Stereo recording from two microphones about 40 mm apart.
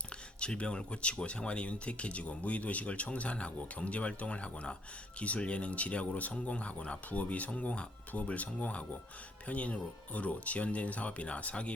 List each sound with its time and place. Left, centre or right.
0.3 s speech: left